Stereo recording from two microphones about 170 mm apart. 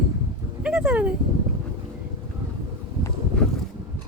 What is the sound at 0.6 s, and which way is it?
Speech, 5° right (ahead or behind).